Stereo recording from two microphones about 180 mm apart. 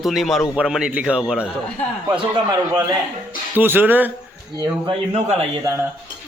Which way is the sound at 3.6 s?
10° right (ahead or behind).